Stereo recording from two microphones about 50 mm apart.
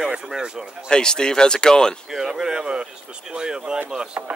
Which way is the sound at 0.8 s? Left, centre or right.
Centre.